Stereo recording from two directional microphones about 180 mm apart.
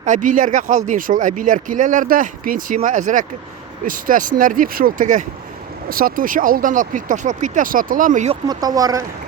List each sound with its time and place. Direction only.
0.0 s speech: 45° right (ahead or behind)
8.4 s speech: 20° right (ahead or behind)